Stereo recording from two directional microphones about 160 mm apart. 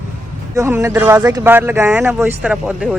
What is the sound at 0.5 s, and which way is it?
Speech, 15° right (ahead or behind).